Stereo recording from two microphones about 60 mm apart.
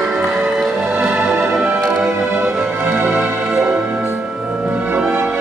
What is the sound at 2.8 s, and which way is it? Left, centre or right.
Music, right.